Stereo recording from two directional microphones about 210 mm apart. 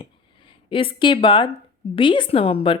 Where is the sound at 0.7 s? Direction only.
25° left (ahead or behind).